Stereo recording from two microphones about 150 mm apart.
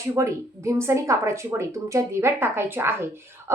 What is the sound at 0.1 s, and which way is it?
A woman's voice, 20° right (ahead or behind).